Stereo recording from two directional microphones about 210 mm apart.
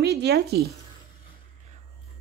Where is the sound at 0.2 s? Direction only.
50° right (ahead or behind).